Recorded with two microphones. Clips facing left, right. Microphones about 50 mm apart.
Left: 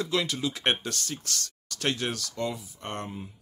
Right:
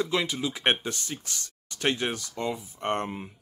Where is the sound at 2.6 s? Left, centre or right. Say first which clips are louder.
Right 7 dB; right.